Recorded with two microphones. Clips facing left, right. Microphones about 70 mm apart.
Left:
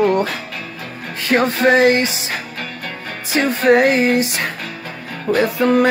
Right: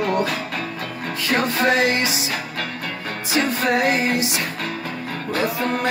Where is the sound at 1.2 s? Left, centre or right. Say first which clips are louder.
Left 4 dB; left.